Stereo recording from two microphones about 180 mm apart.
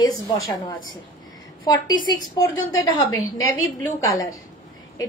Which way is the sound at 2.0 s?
20° left (ahead or behind).